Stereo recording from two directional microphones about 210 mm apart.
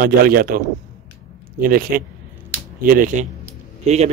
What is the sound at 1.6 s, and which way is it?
A man's voice, 45° right (ahead or behind).